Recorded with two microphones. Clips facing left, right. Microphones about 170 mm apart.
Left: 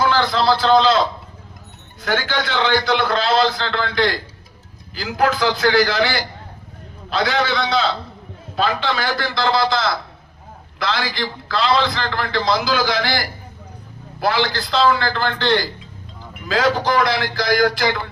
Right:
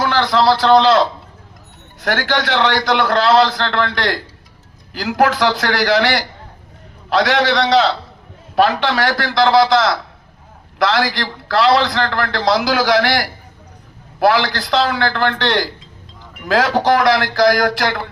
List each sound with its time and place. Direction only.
0.0 s a man's voice: 75° right (ahead or behind)